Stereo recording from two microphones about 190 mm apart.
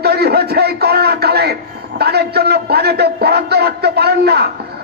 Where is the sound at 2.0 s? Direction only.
55° right (ahead or behind).